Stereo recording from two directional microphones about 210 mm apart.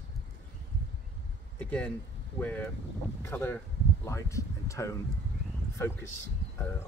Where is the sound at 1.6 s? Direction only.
5° left (ahead or behind).